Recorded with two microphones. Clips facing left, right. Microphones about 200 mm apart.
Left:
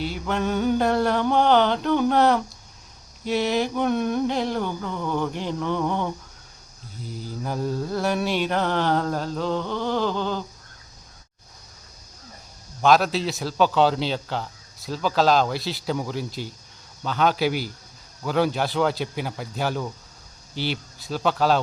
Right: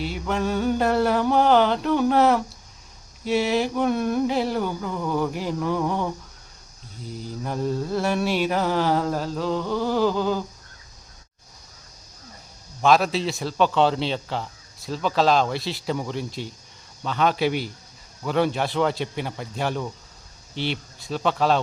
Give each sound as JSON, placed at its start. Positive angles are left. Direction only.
{"t": 0.0, "sound": "a man's voice", "side_deg": 0}
{"t": 12.8, "sound": "a man's voice", "side_deg": 0}